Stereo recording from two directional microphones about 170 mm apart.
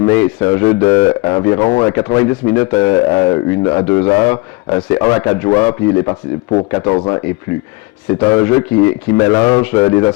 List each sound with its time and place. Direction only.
0.0 s a man's voice: 10° left (ahead or behind)